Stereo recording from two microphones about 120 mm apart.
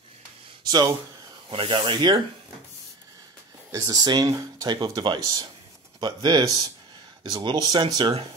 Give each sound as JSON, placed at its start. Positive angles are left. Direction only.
{"t": 0.7, "sound": "speech", "side_deg": -35}
{"t": 1.5, "sound": "speech", "side_deg": -50}
{"t": 3.7, "sound": "speech", "side_deg": -30}